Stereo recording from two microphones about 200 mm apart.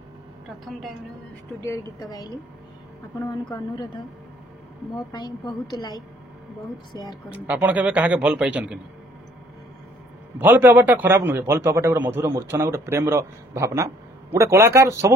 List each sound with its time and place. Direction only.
1.6 s a woman's voice: 15° left (ahead or behind)
3.5 s a woman's voice: 20° left (ahead or behind)
5.1 s a woman's voice: 20° left (ahead or behind)
7.2 s a man's voice: 5° right (ahead or behind)
10.4 s a man's voice: 10° right (ahead or behind)